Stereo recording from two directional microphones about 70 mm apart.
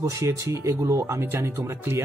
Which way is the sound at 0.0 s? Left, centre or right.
Right.